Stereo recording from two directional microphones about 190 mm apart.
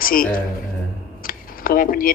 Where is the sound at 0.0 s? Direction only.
50° left (ahead or behind).